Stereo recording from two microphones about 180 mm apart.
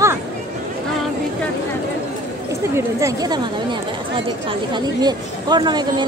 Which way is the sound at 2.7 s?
20° right (ahead or behind).